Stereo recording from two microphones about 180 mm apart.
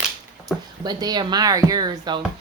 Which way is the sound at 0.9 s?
25° right (ahead or behind).